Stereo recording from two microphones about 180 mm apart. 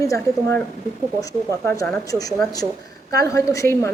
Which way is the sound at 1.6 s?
15° left (ahead or behind).